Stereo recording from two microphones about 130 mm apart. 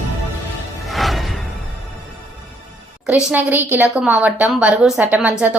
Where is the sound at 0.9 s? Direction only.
Centre (ahead or behind).